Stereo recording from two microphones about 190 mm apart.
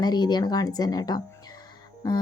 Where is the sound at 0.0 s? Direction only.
20° left (ahead or behind).